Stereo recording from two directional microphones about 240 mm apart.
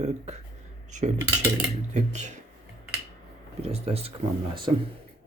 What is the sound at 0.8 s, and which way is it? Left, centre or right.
Cutlery, right.